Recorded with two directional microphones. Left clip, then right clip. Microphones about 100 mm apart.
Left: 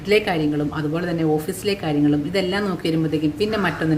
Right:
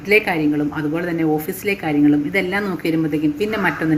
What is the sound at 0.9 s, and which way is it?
A woman's voice, 15° left (ahead or behind).